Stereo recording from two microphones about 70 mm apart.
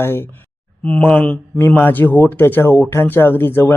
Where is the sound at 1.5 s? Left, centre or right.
Left.